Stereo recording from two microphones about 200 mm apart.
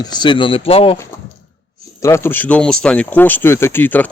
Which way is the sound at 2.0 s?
10° left (ahead or behind).